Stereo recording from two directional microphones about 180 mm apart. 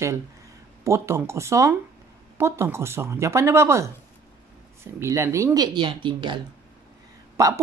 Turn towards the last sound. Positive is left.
turn(degrees=-15)  # may be behind; listen again after turning